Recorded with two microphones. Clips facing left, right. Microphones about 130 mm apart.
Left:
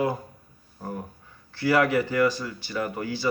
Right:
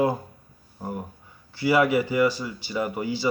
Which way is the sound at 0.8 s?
15° right (ahead or behind).